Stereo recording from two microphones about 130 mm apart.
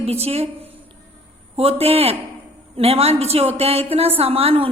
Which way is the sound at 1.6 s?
50° right (ahead or behind).